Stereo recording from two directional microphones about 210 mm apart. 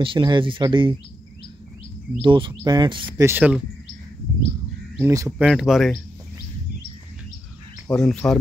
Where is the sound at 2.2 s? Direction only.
25° right (ahead or behind).